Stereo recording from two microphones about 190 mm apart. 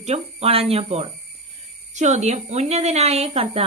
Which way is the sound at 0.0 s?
35° right (ahead or behind).